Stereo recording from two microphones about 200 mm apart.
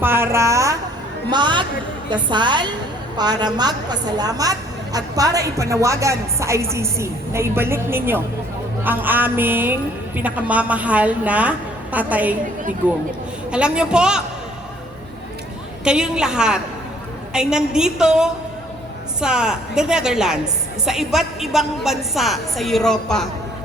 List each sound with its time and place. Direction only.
0.0 s a sound: 10° right (ahead or behind)
1.3 s a woman's voice: 25° right (ahead or behind)
13.5 s a woman's voice: 5° right (ahead or behind)
15.8 s a woman's voice: 5° right (ahead or behind)